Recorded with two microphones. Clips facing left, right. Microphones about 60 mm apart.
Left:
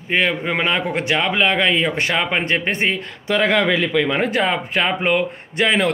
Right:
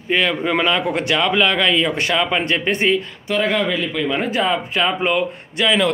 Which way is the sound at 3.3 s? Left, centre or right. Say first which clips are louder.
Left 2 dB; left.